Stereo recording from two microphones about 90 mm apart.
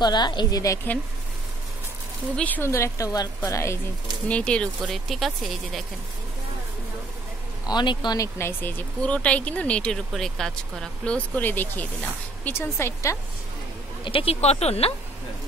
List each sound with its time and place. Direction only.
0.0 s a woman's voice: 55° left (ahead or behind)
0.9 s speech: 20° left (ahead or behind)
2.3 s speech: 20° left (ahead or behind)
2.6 s speech: 30° left (ahead or behind)
4.3 s speech: 15° left (ahead or behind)
4.8 s speech: centre (ahead or behind)
7.6 s speech: 55° left (ahead or behind)
8.2 s speech: 25° left (ahead or behind); by 11.1 s 5° left (ahead or behind)
11.3 s speech: 20° left (ahead or behind)
12.6 s speech: 30° left (ahead or behind)
14.0 s speech: 90° left